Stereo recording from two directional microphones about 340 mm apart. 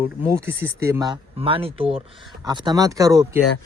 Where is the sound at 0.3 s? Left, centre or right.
Centre.